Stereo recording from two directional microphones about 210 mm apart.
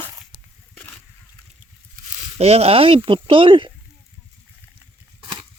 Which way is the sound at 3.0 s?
25° right (ahead or behind).